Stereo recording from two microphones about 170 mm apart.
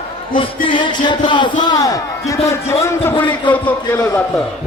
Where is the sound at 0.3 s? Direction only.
30° left (ahead or behind).